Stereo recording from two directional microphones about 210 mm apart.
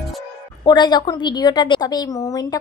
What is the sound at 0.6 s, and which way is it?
A woman's voice, 20° left (ahead or behind).